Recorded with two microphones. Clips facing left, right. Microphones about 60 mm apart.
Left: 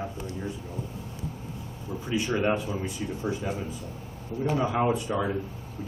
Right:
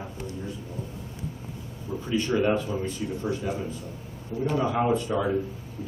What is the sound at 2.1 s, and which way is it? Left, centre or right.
Speech, centre.